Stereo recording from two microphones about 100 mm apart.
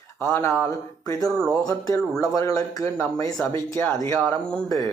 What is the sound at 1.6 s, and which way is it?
Speech, 35° left (ahead or behind).